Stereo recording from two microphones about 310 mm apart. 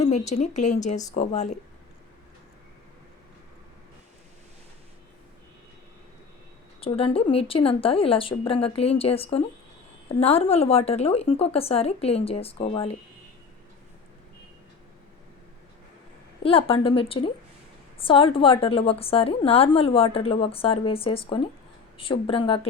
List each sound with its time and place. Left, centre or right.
0.0 s speech: left
6.7 s a woman's voice: centre
16.4 s a woman's voice: centre